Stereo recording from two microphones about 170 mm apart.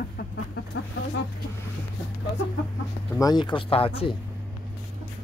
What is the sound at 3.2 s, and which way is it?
Speech, 25° left (ahead or behind).